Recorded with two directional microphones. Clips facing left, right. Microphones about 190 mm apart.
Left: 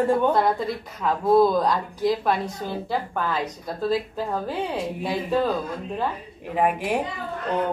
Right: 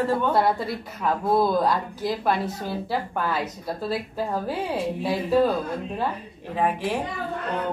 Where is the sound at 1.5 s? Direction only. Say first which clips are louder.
Even; 5° right (ahead or behind).